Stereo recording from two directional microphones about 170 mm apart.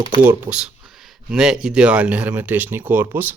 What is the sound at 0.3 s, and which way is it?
Speech, 10° right (ahead or behind).